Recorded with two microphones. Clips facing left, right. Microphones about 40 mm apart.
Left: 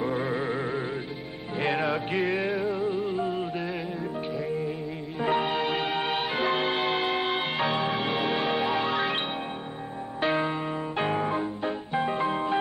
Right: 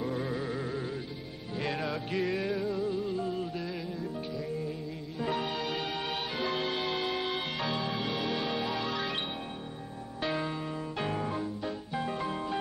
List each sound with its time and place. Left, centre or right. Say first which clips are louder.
0.0 s music: left 5 dB; left
5.2 s music: left 7 dB; left
10.2 s music: left 7 dB; left